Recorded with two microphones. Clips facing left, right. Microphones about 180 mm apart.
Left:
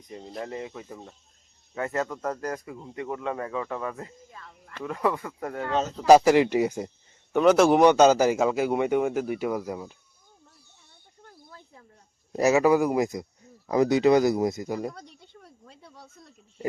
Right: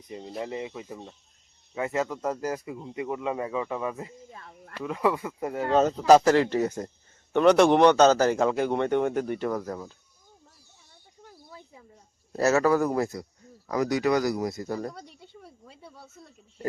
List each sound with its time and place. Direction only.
0.3 s speech: 5° right (ahead or behind)
0.5 s speech: 15° right (ahead or behind)
4.3 s a sound: 25° right (ahead or behind)
4.7 s speech: 5° right (ahead or behind)
6.1 s speech: 10° left (ahead or behind)
11.2 s cricket: 10° right (ahead or behind)
12.3 s speech: 15° left (ahead or behind)
14.9 s speech: 5° right (ahead or behind)